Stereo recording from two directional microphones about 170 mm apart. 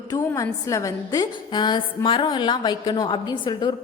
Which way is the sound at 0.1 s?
20° left (ahead or behind).